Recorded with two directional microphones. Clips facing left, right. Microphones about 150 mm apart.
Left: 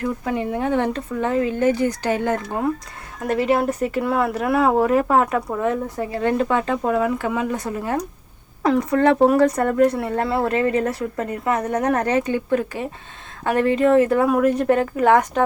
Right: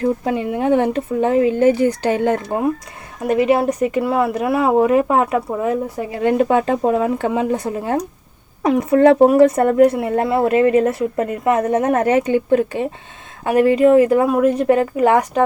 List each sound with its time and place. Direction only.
0.3 s speech: 20° right (ahead or behind)
3.2 s speech: 10° right (ahead or behind); by 7.6 s 30° right (ahead or behind)
8.6 s speech: 20° right (ahead or behind)
13.4 s speech: 10° right (ahead or behind)